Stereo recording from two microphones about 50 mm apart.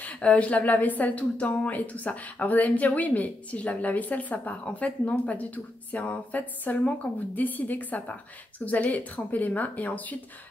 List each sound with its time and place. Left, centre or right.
0.0 s speech: left